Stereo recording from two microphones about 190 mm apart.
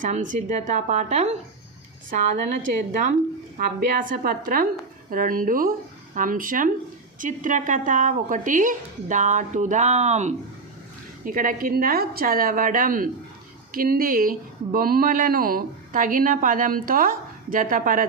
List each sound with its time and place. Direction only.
0.0 s a woman's voice: 45° right (ahead or behind)
2.9 s a woman's voice: 45° right (ahead or behind)